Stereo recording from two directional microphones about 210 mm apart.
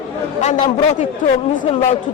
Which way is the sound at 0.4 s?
35° left (ahead or behind).